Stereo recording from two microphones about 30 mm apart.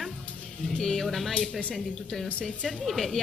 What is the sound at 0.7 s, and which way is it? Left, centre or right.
Speech, centre.